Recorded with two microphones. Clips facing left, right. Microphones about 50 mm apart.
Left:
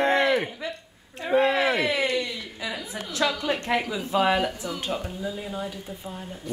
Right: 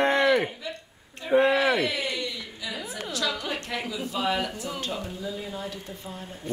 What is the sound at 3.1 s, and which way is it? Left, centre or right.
A woman's voice, left.